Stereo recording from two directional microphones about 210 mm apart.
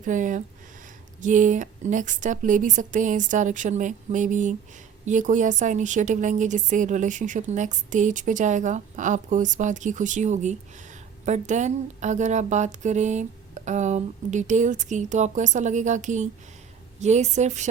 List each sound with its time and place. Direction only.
0.0 s a woman's voice: 35° right (ahead or behind)